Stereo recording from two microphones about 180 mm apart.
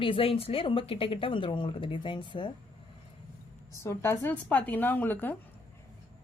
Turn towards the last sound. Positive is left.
turn(degrees=10)  # may be behind; listen again after turning